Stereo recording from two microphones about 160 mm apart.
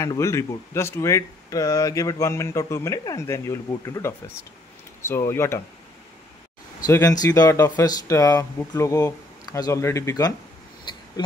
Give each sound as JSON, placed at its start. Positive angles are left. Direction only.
{"t": 0.0, "sound": "speech", "side_deg": 20}
{"t": 6.9, "sound": "speech", "side_deg": 20}